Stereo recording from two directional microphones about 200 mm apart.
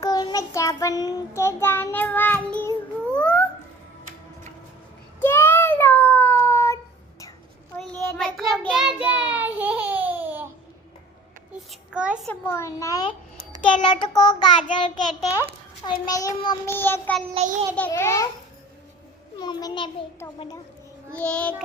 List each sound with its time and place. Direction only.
0.0 s child singing: 20° left (ahead or behind)
5.2 s child singing: 10° left (ahead or behind)
8.0 s child singing: 5° left (ahead or behind)
11.7 s a child's voice: 5° right (ahead or behind)
12.3 s a child's voice: 10° left (ahead or behind)
13.3 s a sound: 30° right (ahead or behind)
14.0 s child singing: 20° left (ahead or behind)
16.0 s a child's voice: 20° left (ahead or behind)
17.3 s a child's voice: 40° right (ahead or behind)
17.7 s a child's voice: 10° left (ahead or behind)
19.4 s child singing: 20° left (ahead or behind)
21.1 s child singing: 5° left (ahead or behind)